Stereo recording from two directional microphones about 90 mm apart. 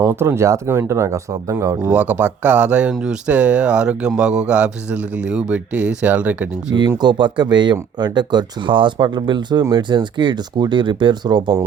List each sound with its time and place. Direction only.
0.0 s speech: 30° right (ahead or behind)
1.9 s speech: 15° right (ahead or behind)
6.7 s speech: 55° right (ahead or behind)